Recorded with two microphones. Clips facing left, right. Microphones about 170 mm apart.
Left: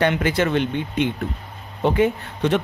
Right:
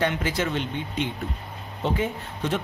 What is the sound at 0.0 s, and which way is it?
Speech, 65° left (ahead or behind).